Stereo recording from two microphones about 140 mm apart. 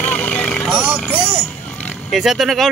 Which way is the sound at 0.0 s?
10° left (ahead or behind).